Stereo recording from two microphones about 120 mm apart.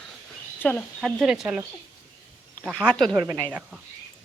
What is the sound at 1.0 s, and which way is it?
Speech, centre (ahead or behind).